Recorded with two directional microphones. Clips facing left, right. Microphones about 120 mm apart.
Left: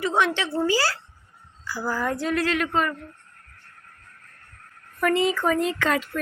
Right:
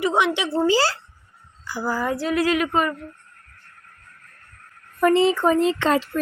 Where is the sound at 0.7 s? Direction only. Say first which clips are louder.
Right 4 dB; 25° right (ahead or behind); by 2.9 s 10° right (ahead or behind).